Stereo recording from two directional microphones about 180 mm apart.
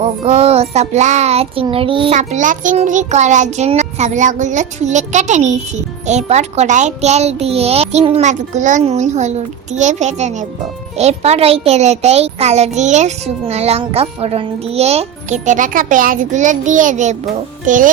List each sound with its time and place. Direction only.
0.0 s a child's voice: 35° right (ahead or behind)
1.6 s child singing: 30° right (ahead or behind)
2.1 s a child's voice: 45° right (ahead or behind)